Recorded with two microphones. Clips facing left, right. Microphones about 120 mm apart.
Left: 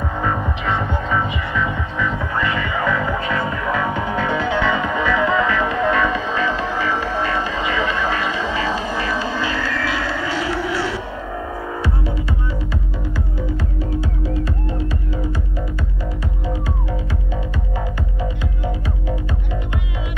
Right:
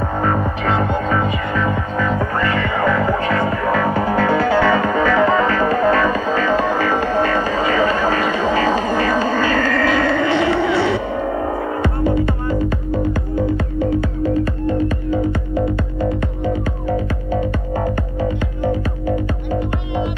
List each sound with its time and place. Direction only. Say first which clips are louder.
0.2 s music: right 3 dB; 50° right (ahead or behind); by 11.0 s 65° right (ahead or behind)
11.8 s music: right 8 dB; 50° right (ahead or behind)